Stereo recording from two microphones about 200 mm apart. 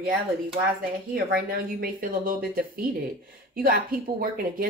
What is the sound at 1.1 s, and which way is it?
A woman's voice, 50° right (ahead or behind).